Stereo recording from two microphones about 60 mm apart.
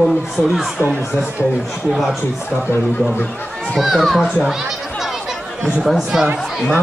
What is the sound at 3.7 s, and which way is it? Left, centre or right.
Speech, centre.